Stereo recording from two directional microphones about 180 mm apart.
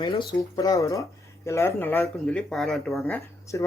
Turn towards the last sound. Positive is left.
turn(degrees=10)  # may be behind; listen again after turning